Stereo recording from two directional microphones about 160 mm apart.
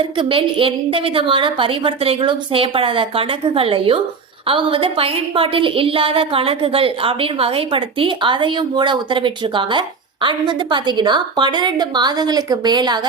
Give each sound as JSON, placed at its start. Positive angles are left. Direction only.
{"t": 0.0, "sound": "a woman's voice", "side_deg": -35}